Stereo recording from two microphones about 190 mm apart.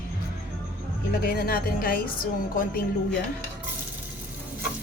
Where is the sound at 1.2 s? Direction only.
50° left (ahead or behind).